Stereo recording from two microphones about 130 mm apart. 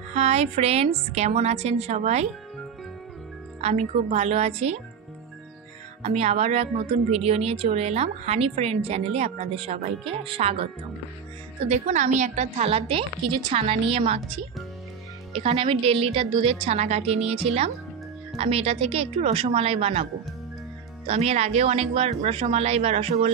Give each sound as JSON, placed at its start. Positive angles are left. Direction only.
{"t": 0.1, "sound": "a woman's voice", "side_deg": -60}
{"t": 3.6, "sound": "a woman's voice", "side_deg": -55}
{"t": 6.0, "sound": "a woman's voice", "side_deg": -55}
{"t": 11.6, "sound": "a woman's voice", "side_deg": -65}
{"t": 21.1, "sound": "a woman's voice", "side_deg": -55}